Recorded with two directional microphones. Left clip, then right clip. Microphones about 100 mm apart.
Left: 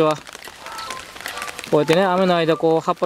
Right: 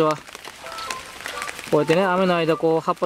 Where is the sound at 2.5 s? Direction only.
5° left (ahead or behind).